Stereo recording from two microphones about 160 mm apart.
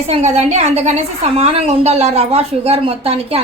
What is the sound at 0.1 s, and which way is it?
A woman's voice, 40° right (ahead or behind).